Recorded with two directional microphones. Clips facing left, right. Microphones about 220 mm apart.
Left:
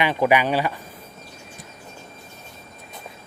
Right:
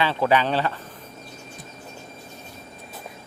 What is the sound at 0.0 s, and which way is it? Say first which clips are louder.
Speech: left 2 dB; 15° left (ahead or behind).